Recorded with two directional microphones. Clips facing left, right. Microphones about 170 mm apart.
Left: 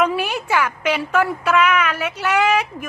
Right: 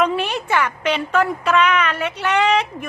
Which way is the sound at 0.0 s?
5° left (ahead or behind).